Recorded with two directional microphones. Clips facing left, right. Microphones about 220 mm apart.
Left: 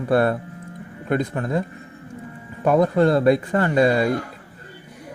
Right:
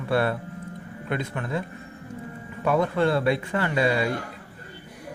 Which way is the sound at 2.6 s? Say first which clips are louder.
Left 5 dB; 45° left (ahead or behind).